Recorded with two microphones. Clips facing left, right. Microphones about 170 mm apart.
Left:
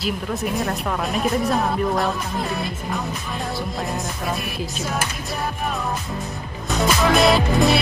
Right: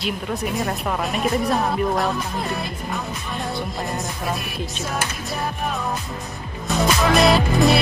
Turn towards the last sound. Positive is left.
turn(degrees=0)  # may be behind; listen again after turning